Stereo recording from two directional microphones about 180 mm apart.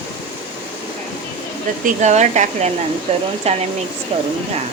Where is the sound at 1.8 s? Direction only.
40° right (ahead or behind).